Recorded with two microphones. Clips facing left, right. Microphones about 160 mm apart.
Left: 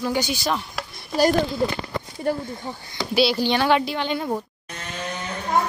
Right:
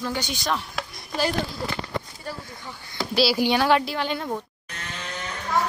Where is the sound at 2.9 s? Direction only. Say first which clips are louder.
Left 1 dB; 5° right (ahead or behind).